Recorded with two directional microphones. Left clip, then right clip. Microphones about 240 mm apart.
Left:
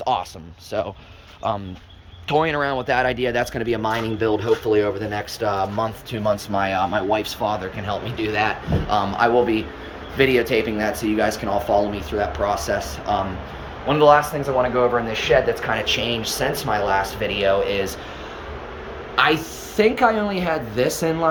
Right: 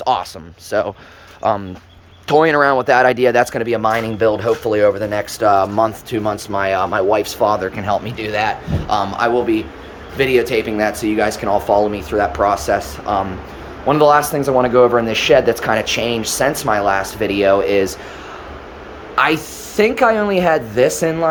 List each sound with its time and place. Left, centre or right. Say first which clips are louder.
0.0 s speech: right 5 dB; centre
13.8 s speech: right 3 dB; right
15.8 s speech: right 4 dB; centre
19.1 s speech: right 3 dB; centre